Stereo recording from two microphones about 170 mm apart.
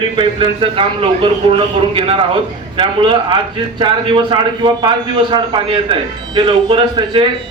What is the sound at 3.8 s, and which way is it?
Speech, 30° right (ahead or behind).